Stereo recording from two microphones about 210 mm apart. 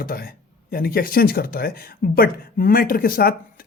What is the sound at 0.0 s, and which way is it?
Speech, 45° left (ahead or behind).